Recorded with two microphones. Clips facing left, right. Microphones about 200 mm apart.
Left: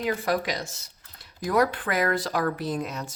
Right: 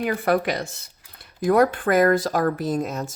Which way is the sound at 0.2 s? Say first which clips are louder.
Right 5 dB; 60° right (ahead or behind).